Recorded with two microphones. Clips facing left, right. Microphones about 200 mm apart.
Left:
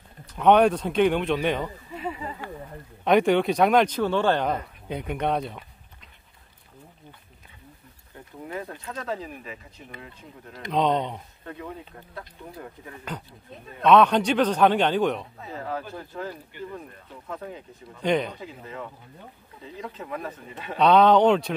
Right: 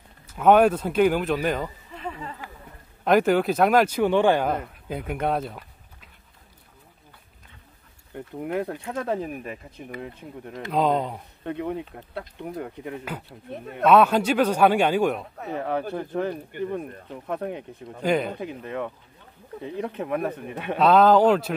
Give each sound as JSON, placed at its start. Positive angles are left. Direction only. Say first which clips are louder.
{"t": 0.3, "sound": "speech", "louder": "right 1 dB", "side_deg": -5}
{"t": 3.0, "sound": "speech", "louder": "even", "side_deg": 0}
{"t": 8.1, "sound": "speech", "louder": "right 7 dB", "side_deg": -60}
{"t": 10.7, "sound": "speech", "louder": "right 1 dB", "side_deg": -5}
{"t": 11.4, "sound": "speech", "louder": "right 9 dB", "side_deg": -65}
{"t": 13.8, "sound": "a man's voice", "louder": "even", "side_deg": -5}
{"t": 15.3, "sound": "speech", "louder": "right 5 dB", "side_deg": -65}
{"t": 16.5, "sound": "speech", "louder": "right 8 dB", "side_deg": -50}
{"t": 17.3, "sound": "speech", "louder": "right 6 dB", "side_deg": -65}
{"t": 18.0, "sound": "speech", "louder": "right 1 dB", "side_deg": -5}
{"t": 18.3, "sound": "speech", "louder": "right 7 dB", "side_deg": -65}
{"t": 20.7, "sound": "speech", "louder": "right 1 dB", "side_deg": 0}